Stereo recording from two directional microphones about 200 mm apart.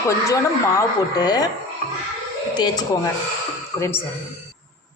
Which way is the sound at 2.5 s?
20° left (ahead or behind).